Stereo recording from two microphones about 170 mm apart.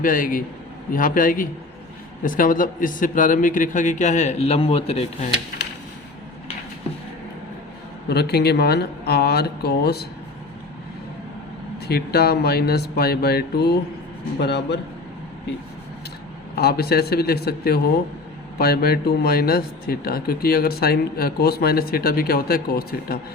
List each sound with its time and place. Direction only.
0.0 s a man's voice: 55° left (ahead or behind); by 5.3 s 35° left (ahead or behind)
8.1 s speech: 70° left (ahead or behind)
11.9 s speech: 65° left (ahead or behind)
14.3 s a man's voice: 80° left
16.6 s speech: 65° left (ahead or behind)